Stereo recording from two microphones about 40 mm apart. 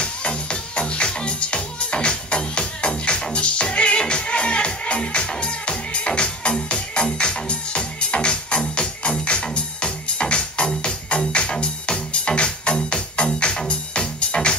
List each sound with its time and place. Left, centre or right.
0.0 s music: left